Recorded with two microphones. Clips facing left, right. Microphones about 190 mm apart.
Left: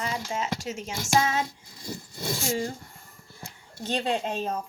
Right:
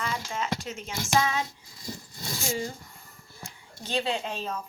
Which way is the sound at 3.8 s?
45° left (ahead or behind).